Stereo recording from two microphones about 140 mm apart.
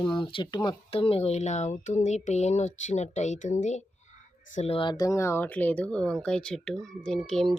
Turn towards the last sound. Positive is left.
turn(degrees=0)  # may be behind; listen again after turning